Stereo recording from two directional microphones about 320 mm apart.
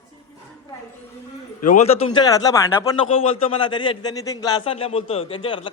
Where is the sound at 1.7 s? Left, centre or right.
Centre.